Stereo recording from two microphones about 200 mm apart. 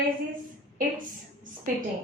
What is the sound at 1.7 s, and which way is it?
Speech, 40° right (ahead or behind).